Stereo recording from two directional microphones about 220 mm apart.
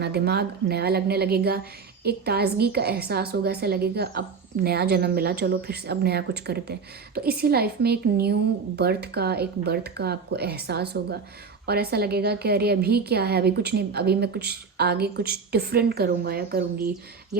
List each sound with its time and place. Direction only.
0.0 s a woman's voice: 45° right (ahead or behind)